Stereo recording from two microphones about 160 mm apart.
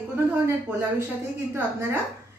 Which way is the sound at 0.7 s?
10° right (ahead or behind).